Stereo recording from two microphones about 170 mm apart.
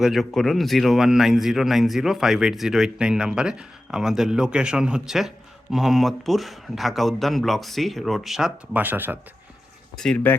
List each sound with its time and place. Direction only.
0.0 s speech: centre (ahead or behind)
10.0 s speech: 5° left (ahead or behind)